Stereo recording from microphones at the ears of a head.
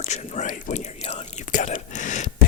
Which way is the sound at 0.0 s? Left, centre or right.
Left.